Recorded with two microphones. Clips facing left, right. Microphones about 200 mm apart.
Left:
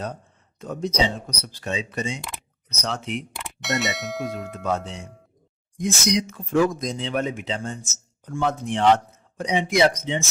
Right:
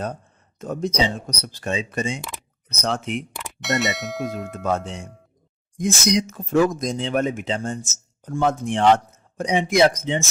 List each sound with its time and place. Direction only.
0.6 s speech: 45° right (ahead or behind)
3.3 s speech: centre (ahead or behind)
4.6 s speech: 50° right (ahead or behind)